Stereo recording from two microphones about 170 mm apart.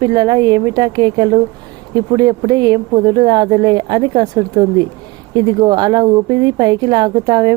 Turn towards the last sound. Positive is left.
turn(degrees=-25)  # may be behind; listen again after turning